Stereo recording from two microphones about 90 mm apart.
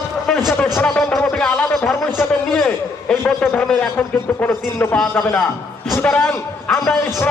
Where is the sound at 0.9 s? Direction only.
5° left (ahead or behind).